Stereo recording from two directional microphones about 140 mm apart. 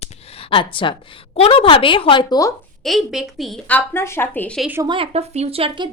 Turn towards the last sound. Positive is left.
turn(degrees=-40)  # may be behind; listen again after turning